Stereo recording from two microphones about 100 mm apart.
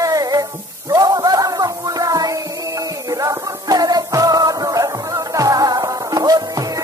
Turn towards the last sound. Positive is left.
turn(degrees=-40)  # may be behind; listen again after turning